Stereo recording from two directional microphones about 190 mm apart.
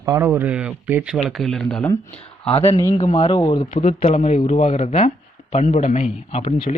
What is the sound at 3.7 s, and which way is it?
A man's voice, 35° left (ahead or behind).